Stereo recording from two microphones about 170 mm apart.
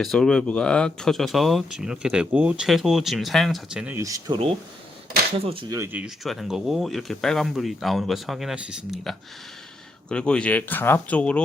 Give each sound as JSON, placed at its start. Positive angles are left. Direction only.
{"t": 0.0, "sound": "speech", "side_deg": 5}
{"t": 3.9, "sound": "speech", "side_deg": -20}
{"t": 5.5, "sound": "speech", "side_deg": -30}
{"t": 5.7, "sound": "speech", "side_deg": -10}
{"t": 6.2, "sound": "speech", "side_deg": 0}